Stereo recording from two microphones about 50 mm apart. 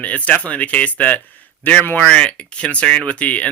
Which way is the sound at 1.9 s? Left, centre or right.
Centre.